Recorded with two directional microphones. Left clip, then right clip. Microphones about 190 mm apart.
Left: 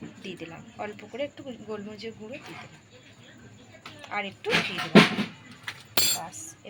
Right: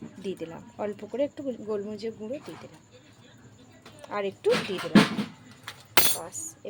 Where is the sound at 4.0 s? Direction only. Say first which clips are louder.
Right 3 dB; 60° right (ahead or behind).